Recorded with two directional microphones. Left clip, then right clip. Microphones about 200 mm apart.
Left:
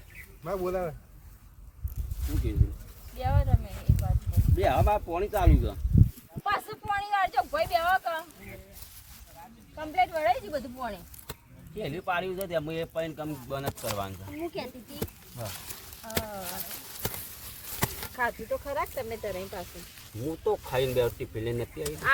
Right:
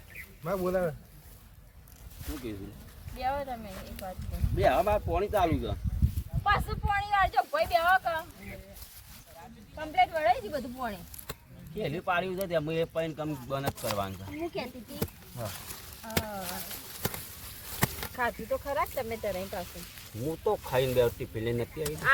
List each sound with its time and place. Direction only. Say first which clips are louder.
0.4 s speech: right 1 dB; 5° left (ahead or behind)
2.2 s speech: left 2 dB; centre (ahead or behind)
4.5 s speech: even; centre (ahead or behind)
6.4 s speech: right 2 dB; 15° left (ahead or behind)
9.7 s speech: even; 15° left (ahead or behind)
11.8 s speech: right 1 dB; 5° right (ahead or behind)
15.4 s a sound: left 1 dB; 15° left (ahead or behind)
16.2 s speech: even; 5° left (ahead or behind)
17.7 s a sound: right 1 dB; 20° right (ahead or behind)
18.2 s speech: left 1 dB; 5° left (ahead or behind)
19.7 s a sound: right 1 dB; 20° right (ahead or behind)
20.4 s speech: even; centre (ahead or behind)